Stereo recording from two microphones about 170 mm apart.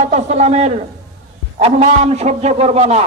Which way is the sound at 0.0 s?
40° right (ahead or behind).